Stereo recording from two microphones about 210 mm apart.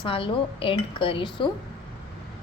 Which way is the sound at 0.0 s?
25° left (ahead or behind).